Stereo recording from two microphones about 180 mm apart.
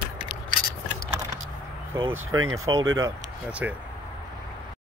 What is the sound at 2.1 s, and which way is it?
Speech, 20° right (ahead or behind).